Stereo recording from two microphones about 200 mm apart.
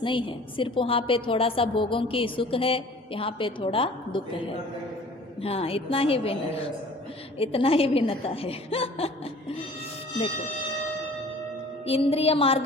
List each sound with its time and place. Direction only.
0.0 s a woman's voice: 25° left (ahead or behind)
5.4 s a woman's voice: 30° left (ahead or behind)
7.3 s a woman's voice: 30° left (ahead or behind)
11.9 s a woman's voice: 30° left (ahead or behind)